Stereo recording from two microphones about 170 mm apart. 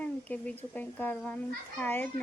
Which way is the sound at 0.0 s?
10° left (ahead or behind).